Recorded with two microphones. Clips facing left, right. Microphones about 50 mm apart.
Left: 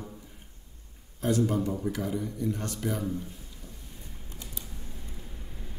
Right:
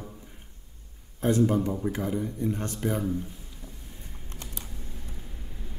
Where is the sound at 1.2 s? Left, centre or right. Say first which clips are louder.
Right 3 dB; right.